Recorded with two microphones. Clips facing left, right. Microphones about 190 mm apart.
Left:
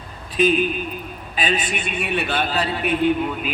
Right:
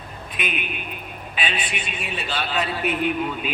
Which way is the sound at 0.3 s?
35° left (ahead or behind).